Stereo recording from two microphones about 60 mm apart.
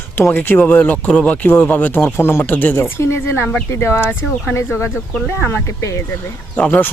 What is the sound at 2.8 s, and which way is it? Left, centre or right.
Speech, left.